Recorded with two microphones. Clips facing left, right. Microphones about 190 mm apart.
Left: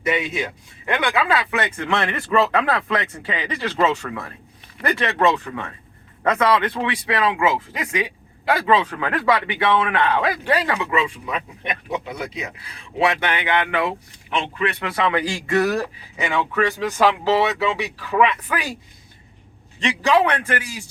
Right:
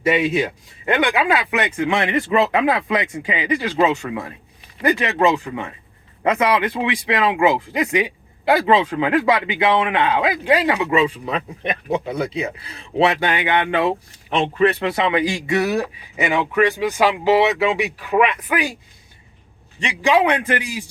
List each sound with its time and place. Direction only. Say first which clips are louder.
0.9 s speech: right 2 dB; 20° right (ahead or behind)
6.8 s speech: right 2 dB; 25° right (ahead or behind)
14.8 s speech: right 3 dB; 20° right (ahead or behind)
19.8 s speech: right 1 dB; 10° right (ahead or behind)
20.5 s speech: right 3 dB; 25° right (ahead or behind)